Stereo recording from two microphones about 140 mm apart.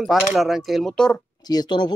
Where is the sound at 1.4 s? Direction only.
30° left (ahead or behind).